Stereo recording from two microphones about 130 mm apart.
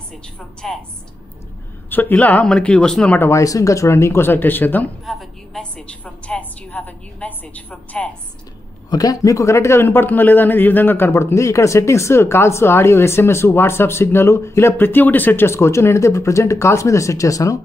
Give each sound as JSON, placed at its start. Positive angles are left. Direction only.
{"t": 0.6, "sound": "a woman's voice", "side_deg": 0}
{"t": 1.9, "sound": "a woman's voice", "side_deg": 15}
{"t": 3.2, "sound": "a man's voice", "side_deg": 20}
{"t": 5.0, "sound": "a woman's voice", "side_deg": 0}
{"t": 8.9, "sound": "a man's voice", "side_deg": 30}